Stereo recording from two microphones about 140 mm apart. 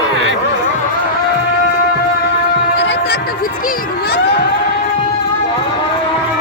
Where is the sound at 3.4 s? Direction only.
90° left.